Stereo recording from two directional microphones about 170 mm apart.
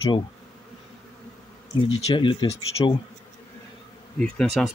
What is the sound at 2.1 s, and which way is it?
Speech, 30° left (ahead or behind).